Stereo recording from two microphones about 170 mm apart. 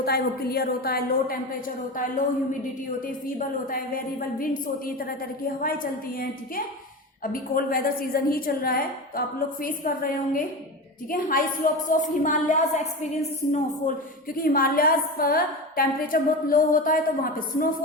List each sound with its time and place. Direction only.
0.0 s a woman's voice: 65° left (ahead or behind)
2.0 s a woman's voice: 50° left (ahead or behind)
5.6 s a woman's voice: 55° left (ahead or behind)
7.5 s a woman's voice: 55° left (ahead or behind)
14.3 s a woman's voice: 60° left (ahead or behind)